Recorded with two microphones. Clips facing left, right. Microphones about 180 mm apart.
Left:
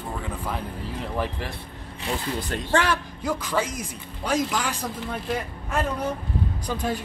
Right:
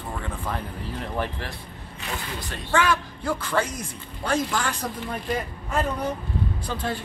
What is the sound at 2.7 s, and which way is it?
Speech, 35° left (ahead or behind).